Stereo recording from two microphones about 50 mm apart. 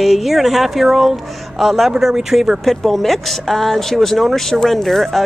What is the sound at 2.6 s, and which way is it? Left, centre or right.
Speech, centre.